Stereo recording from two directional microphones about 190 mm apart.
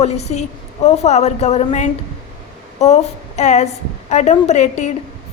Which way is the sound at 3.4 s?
35° left (ahead or behind).